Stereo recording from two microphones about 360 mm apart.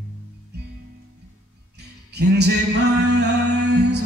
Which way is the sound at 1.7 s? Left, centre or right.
Right.